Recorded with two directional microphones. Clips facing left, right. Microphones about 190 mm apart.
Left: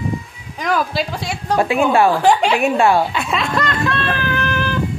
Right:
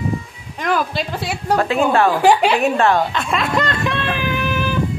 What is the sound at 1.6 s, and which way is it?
Speech, 15° left (ahead or behind).